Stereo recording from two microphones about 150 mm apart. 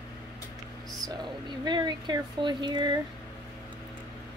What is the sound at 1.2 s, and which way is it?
Speech, 30° right (ahead or behind).